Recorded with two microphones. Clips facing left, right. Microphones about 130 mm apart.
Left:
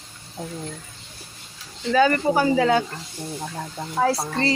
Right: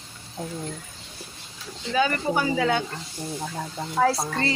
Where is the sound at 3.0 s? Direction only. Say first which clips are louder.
Even; centre (ahead or behind).